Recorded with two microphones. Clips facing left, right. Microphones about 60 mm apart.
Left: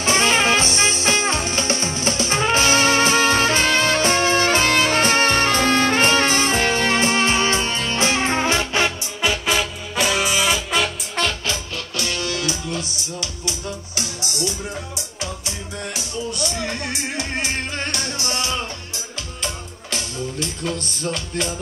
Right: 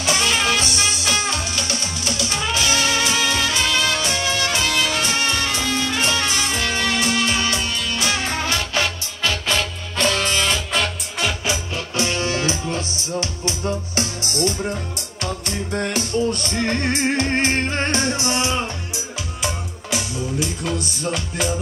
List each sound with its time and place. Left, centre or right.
0.0 s music: left; by 10.9 s centre
11.1 s music: centre
11.9 s music: right
15.0 s music: right
19.4 s music: centre